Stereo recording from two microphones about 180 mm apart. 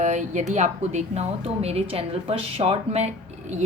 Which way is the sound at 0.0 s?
40° right (ahead or behind).